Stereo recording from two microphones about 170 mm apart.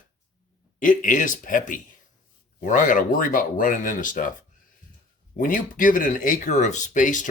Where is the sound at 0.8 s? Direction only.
50° left (ahead or behind).